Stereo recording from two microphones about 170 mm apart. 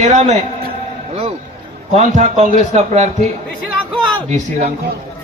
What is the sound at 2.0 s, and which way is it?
A man's voice, 45° right (ahead or behind).